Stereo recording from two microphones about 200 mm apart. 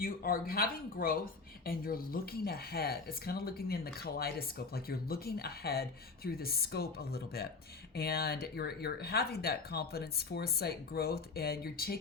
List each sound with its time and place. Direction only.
0.0 s speech: 45° left (ahead or behind)